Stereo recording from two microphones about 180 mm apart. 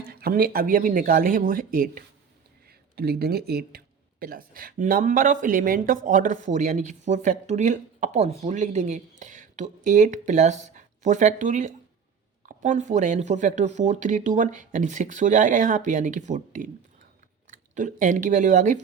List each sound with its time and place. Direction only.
0.0 s speech: 55° right (ahead or behind)